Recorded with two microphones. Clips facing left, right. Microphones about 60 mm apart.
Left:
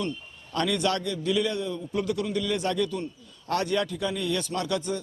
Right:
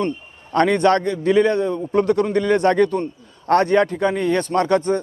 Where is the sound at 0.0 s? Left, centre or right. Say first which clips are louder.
Right 8 dB; right.